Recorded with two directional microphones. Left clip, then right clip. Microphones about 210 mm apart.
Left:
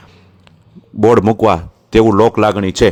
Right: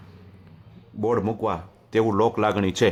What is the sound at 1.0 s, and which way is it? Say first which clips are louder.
Speech: left 14 dB; 45° left (ahead or behind).